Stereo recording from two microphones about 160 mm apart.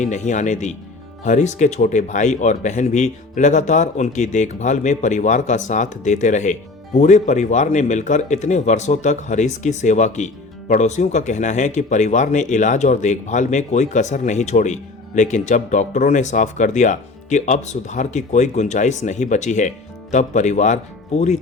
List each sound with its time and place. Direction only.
0.0 s speech: 50° left (ahead or behind)